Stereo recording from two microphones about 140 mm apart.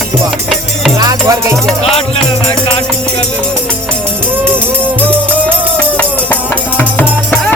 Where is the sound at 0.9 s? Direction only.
25° right (ahead or behind).